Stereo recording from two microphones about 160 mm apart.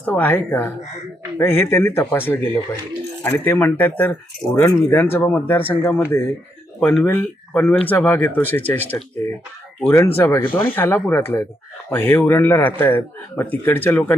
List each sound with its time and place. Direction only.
0.0 s a man's voice: 10° left (ahead or behind)